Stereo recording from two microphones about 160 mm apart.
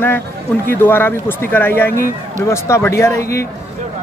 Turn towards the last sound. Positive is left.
turn(degrees=20)  # may be behind; listen again after turning